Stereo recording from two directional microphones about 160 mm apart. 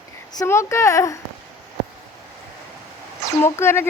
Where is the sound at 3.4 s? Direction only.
15° left (ahead or behind).